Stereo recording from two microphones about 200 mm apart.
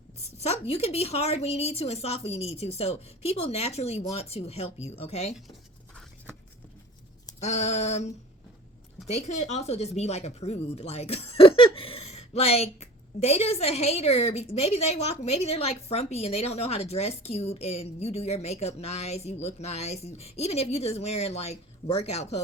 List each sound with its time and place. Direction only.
0.3 s a woman's voice: 30° left (ahead or behind)
7.3 s a woman's voice: 35° left (ahead or behind)